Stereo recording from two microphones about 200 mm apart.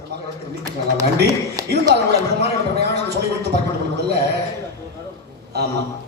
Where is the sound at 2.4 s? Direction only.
55° right (ahead or behind).